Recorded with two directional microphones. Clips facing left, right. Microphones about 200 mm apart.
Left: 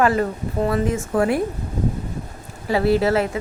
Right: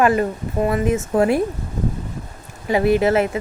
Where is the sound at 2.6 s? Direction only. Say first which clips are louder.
Right 2 dB; 15° right (ahead or behind).